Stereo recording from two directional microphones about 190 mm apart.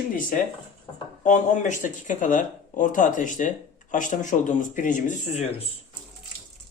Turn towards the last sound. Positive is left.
turn(degrees=45)  # may be behind; listen again after turning